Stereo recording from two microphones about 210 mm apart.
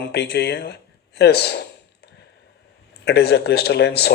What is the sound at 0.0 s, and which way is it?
Speech, 50° left (ahead or behind).